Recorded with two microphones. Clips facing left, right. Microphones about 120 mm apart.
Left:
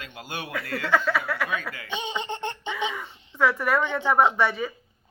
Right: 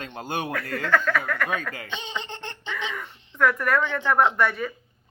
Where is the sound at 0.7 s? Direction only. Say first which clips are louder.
Even; 10° left (ahead or behind).